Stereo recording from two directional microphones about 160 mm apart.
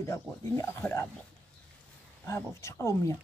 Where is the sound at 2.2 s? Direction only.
20° left (ahead or behind).